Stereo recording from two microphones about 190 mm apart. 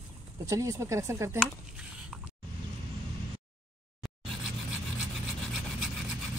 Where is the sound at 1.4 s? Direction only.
5° right (ahead or behind).